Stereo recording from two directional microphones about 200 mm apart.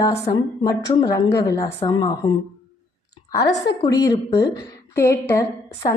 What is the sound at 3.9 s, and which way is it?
A woman's voice, 20° left (ahead or behind).